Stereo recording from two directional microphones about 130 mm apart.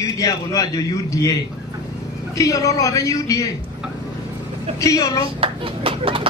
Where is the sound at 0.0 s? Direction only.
25° left (ahead or behind).